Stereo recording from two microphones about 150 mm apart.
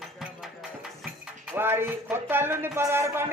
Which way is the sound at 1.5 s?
15° right (ahead or behind).